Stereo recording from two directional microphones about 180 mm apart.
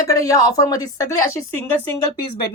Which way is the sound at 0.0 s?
20° left (ahead or behind).